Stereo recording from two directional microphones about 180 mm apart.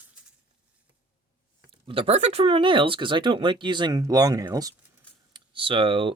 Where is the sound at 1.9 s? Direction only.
30° right (ahead or behind).